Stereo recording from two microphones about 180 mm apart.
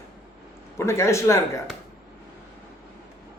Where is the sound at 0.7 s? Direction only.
15° left (ahead or behind).